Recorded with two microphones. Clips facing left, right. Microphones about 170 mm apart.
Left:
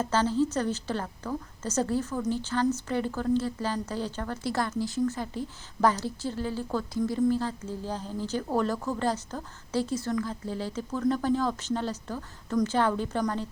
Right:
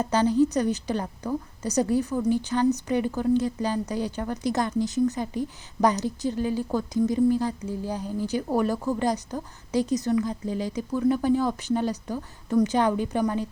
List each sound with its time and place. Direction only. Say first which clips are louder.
0.0 s speech: right 4 dB; 15° right (ahead or behind)